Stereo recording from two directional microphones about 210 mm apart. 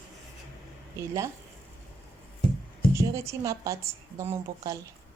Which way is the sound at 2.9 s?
15° right (ahead or behind).